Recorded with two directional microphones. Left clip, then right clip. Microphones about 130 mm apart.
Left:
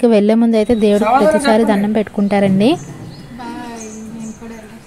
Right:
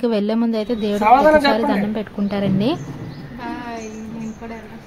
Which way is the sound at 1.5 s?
50° left (ahead or behind).